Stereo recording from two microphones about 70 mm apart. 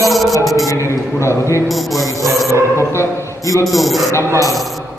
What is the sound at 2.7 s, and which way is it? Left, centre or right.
Speech, left.